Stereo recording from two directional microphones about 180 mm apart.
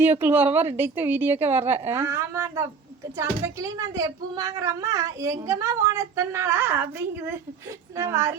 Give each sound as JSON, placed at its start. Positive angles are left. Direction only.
{"t": 0.0, "sound": "speech", "side_deg": -10}
{"t": 7.9, "sound": "speech", "side_deg": -15}